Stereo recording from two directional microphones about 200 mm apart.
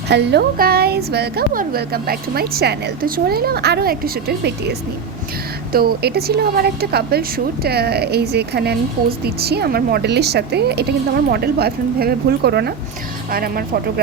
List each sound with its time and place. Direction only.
0.1 s a woman's voice: 55° right (ahead or behind)